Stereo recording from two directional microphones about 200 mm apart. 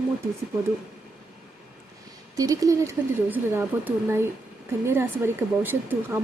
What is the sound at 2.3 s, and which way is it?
Speech, 15° right (ahead or behind).